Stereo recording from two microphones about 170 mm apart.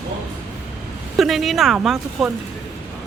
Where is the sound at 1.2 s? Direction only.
Centre (ahead or behind).